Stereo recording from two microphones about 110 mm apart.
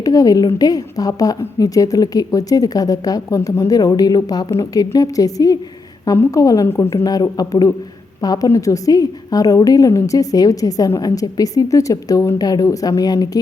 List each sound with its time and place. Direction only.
0.0 s a woman's voice: 30° left (ahead or behind)